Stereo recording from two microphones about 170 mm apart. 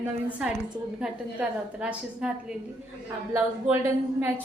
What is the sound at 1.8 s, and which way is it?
Speech, 5° right (ahead or behind).